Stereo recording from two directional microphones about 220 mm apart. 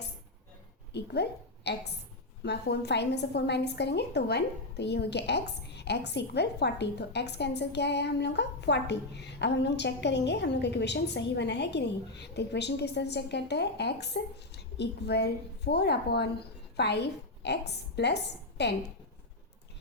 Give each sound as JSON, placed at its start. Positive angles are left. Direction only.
{"t": 0.9, "sound": "a woman's voice", "side_deg": 50}